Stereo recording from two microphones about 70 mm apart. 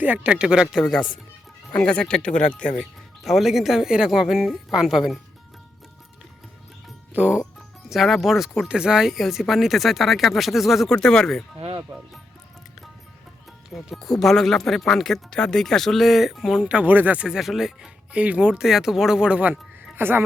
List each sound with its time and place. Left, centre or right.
0.0 s speech: right; by 0.9 s centre
1.9 s speech: centre
3.2 s speech: centre
7.1 s speech: centre
7.9 s speech: centre
10.8 s speech: centre
13.7 s speech: centre
16.6 s speech: centre
17.2 s speech: centre
20.0 s speech: right